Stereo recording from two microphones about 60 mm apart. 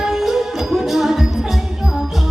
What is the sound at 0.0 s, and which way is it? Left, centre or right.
Music, centre.